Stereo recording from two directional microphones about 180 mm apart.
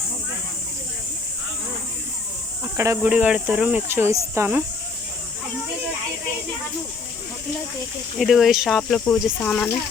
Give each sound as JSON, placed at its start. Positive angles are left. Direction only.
{"t": 2.7, "sound": "speech", "side_deg": -15}
{"t": 8.2, "sound": "speech", "side_deg": 0}